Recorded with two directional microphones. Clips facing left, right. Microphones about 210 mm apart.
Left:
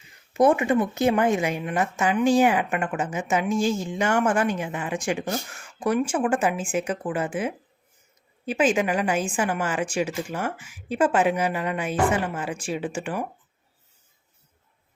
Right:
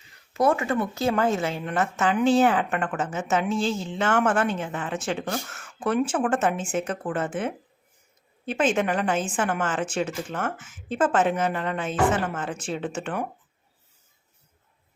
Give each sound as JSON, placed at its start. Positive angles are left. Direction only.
{"t": 0.3, "sound": "a woman's voice", "side_deg": 20}